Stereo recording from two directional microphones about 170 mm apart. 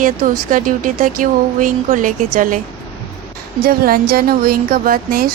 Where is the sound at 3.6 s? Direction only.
60° right (ahead or behind).